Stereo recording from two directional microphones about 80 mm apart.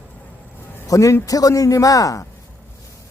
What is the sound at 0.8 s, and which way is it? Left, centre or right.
Speech, left.